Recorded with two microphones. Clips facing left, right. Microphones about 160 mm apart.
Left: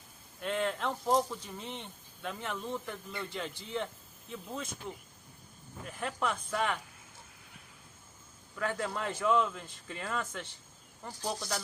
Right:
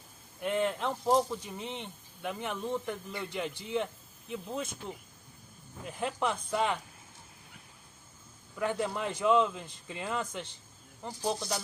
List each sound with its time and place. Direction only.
0.4 s speech: 15° right (ahead or behind)
6.0 s speech: 20° right (ahead or behind)
8.5 s speech: 15° right (ahead or behind)